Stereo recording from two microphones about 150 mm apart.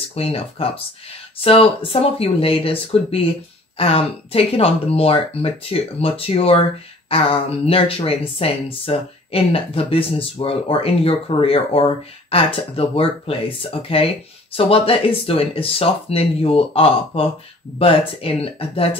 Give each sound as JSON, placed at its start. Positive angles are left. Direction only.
{"t": 0.1, "sound": "speech", "side_deg": 40}